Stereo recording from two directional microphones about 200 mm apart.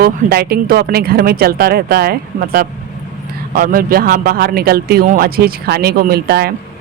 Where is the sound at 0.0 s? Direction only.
50° right (ahead or behind).